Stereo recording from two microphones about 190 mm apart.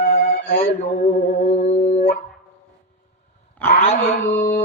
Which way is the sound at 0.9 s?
50° left (ahead or behind).